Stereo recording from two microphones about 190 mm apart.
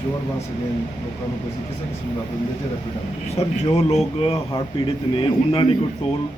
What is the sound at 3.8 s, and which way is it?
A man's voice, 35° left (ahead or behind).